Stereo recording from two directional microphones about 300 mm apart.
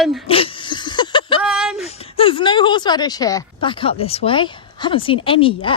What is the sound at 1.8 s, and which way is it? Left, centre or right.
Speech, centre.